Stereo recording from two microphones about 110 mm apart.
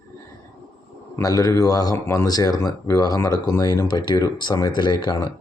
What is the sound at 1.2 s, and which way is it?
Speech, 35° left (ahead or behind).